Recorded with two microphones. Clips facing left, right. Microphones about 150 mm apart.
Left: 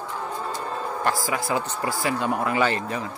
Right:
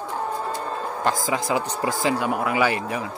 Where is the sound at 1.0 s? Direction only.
20° right (ahead or behind).